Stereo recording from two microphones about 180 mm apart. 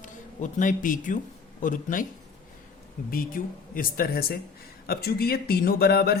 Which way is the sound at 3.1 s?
50° left (ahead or behind).